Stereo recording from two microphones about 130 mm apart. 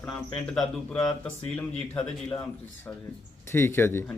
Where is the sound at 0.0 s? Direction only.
5° left (ahead or behind).